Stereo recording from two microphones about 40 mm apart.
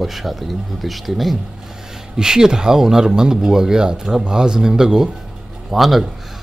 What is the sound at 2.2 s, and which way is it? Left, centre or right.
A man's voice, centre.